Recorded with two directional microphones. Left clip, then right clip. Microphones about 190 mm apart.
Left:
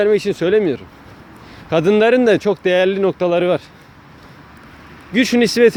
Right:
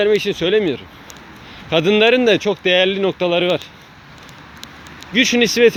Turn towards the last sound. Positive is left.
turn(degrees=25)  # may be behind; listen again after turning